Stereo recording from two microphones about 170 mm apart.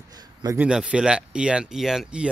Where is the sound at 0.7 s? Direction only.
5° right (ahead or behind).